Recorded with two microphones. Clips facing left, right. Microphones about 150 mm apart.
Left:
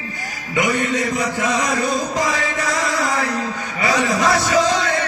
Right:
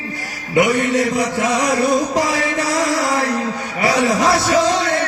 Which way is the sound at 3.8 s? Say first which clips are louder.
Right 2 dB; 65° right (ahead or behind).